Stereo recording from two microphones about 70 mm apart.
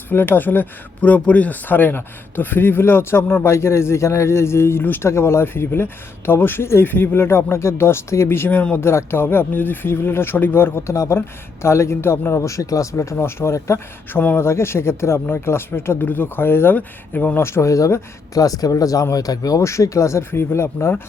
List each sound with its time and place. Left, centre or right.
0.1 s speech: left
14.1 s speech: left
17.4 s speech: left